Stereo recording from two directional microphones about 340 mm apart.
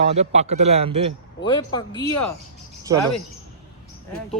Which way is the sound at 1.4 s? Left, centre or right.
Centre.